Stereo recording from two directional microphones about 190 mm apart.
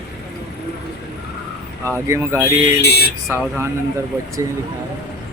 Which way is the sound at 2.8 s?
60° left (ahead or behind).